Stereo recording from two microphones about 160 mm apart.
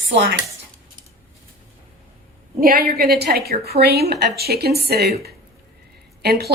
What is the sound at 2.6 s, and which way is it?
A woman's voice, 70° right (ahead or behind).